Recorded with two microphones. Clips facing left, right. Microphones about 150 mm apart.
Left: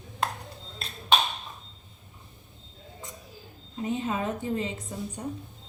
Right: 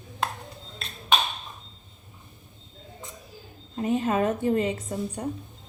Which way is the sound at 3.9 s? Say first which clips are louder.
Right 6 dB; 70° right (ahead or behind).